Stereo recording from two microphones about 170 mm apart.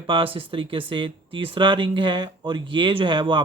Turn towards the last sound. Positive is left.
turn(degrees=-30)  # may be behind; listen again after turning